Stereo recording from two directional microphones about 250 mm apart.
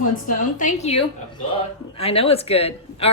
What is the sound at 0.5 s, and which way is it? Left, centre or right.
A woman's voice, left.